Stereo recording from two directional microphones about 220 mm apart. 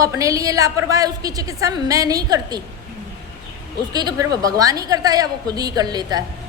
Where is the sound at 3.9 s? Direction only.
20° right (ahead or behind).